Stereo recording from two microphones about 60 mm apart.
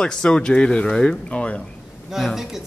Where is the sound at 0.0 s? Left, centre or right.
Centre.